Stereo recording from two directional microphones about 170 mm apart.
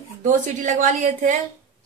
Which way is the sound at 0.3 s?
50° right (ahead or behind).